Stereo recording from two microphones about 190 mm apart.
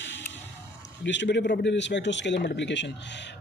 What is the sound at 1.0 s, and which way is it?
Speech, 70° left (ahead or behind).